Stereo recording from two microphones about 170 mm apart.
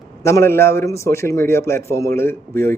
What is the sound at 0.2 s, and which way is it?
Speech, 15° left (ahead or behind).